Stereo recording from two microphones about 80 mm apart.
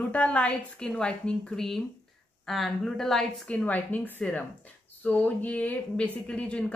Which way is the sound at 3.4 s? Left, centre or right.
Centre.